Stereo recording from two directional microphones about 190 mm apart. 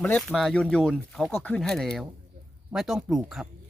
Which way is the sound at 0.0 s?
5° left (ahead or behind).